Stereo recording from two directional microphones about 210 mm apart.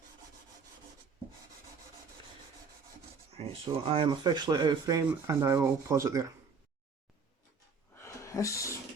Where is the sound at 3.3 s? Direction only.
25° right (ahead or behind).